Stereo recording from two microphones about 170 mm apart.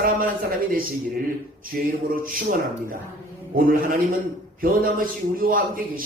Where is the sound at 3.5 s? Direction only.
55° right (ahead or behind).